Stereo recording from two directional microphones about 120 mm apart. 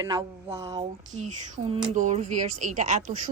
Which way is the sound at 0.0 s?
30° right (ahead or behind).